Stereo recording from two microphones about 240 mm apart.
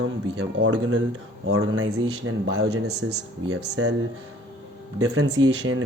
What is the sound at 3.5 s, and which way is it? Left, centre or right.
Speech, right.